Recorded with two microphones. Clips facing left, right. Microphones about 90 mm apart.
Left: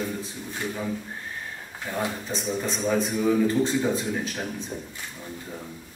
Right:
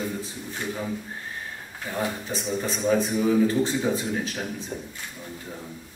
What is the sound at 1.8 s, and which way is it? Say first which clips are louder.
A man's voice: even; 5° right (ahead or behind).